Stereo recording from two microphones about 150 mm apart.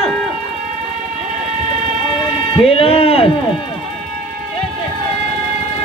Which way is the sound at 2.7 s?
40° left (ahead or behind).